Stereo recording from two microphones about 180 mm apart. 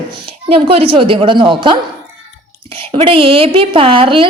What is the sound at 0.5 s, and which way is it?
A woman's voice, 30° right (ahead or behind).